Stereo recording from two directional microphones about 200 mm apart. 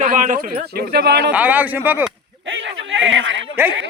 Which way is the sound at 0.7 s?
55° right (ahead or behind).